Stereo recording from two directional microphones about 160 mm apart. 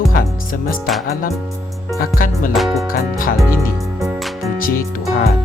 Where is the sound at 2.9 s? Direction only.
60° left (ahead or behind).